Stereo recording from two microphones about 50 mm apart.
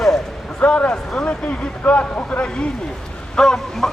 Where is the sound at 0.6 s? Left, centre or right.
Left.